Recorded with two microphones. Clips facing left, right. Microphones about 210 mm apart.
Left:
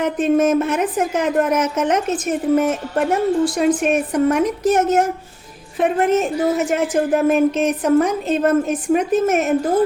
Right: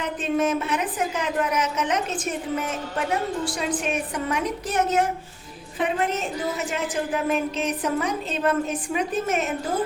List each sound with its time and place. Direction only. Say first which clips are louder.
0.0 s a woman's voice: left 8 dB; 45° left (ahead or behind)